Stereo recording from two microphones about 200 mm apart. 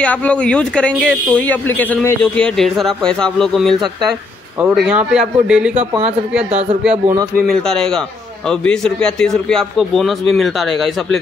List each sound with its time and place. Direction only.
0.0 s speech: 5° left (ahead or behind)